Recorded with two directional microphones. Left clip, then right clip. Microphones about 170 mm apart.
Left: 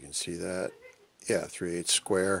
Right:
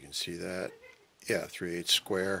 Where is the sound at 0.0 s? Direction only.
25° left (ahead or behind).